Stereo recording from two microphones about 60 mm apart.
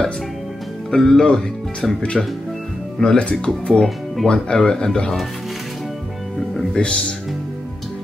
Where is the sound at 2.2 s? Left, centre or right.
Centre.